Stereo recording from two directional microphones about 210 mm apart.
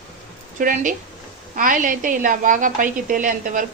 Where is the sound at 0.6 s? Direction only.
40° right (ahead or behind).